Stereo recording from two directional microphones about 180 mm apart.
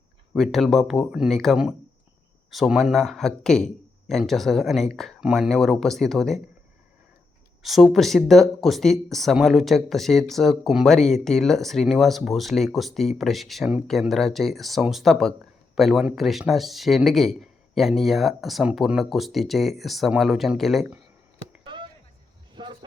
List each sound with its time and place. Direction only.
0.3 s speech: centre (ahead or behind)
7.6 s speech: centre (ahead or behind)
21.6 s a sound: 25° right (ahead or behind)